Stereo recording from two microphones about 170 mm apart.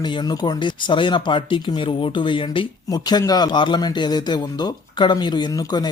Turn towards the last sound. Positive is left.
turn(degrees=25)  # may be behind; listen again after turning